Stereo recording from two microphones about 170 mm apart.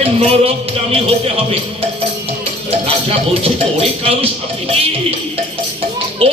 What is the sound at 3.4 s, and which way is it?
Speech, 35° right (ahead or behind).